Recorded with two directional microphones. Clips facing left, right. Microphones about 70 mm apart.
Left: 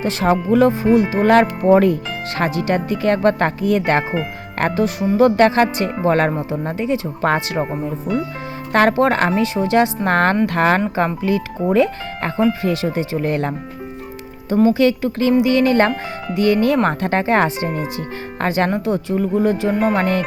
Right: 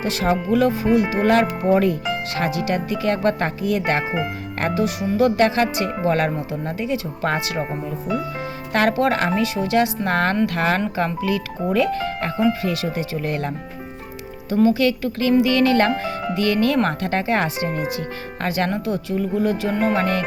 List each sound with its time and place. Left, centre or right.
0.0 s speech: left
8.7 s speech: left
14.7 s speech: left